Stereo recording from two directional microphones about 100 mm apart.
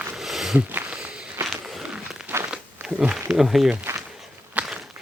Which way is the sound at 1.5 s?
Centre (ahead or behind).